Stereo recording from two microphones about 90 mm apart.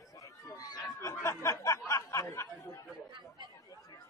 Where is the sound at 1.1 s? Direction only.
30° left (ahead or behind).